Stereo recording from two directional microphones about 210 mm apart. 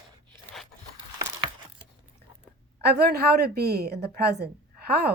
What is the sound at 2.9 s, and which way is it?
A woman's voice, 50° right (ahead or behind).